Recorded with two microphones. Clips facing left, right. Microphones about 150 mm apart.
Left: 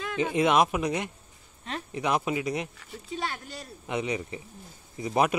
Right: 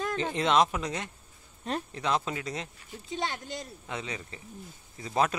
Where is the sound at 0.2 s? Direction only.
10° left (ahead or behind).